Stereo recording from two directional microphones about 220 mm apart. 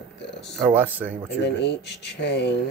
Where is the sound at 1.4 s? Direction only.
50° left (ahead or behind).